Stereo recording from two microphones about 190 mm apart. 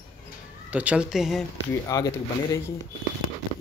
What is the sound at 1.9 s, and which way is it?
Speech, 15° left (ahead or behind).